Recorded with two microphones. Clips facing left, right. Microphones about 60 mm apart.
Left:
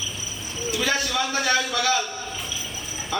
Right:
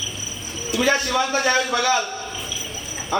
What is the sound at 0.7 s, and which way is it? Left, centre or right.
A man's voice, right.